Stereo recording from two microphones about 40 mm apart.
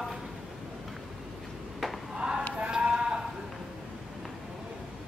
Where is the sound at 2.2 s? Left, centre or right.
Centre.